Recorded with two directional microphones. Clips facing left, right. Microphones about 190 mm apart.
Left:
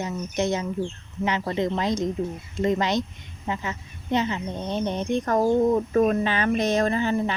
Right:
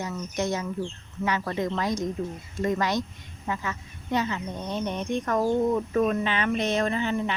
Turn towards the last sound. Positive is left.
turn(degrees=40)  # may be behind; listen again after turning